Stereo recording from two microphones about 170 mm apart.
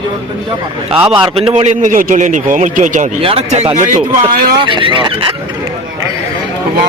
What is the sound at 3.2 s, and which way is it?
Speech, 35° right (ahead or behind).